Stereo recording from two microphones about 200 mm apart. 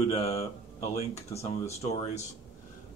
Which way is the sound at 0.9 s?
30° left (ahead or behind).